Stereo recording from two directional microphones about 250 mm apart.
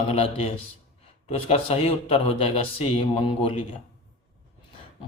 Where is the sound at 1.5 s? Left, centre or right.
Left.